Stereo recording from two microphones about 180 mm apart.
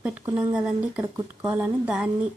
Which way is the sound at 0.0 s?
5° right (ahead or behind).